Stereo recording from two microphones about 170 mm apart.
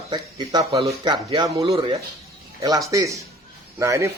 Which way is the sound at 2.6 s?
20° right (ahead or behind).